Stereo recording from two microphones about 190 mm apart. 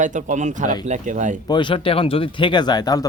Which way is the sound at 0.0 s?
40° right (ahead or behind).